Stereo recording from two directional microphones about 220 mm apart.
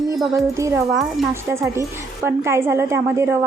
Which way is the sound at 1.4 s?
10° right (ahead or behind).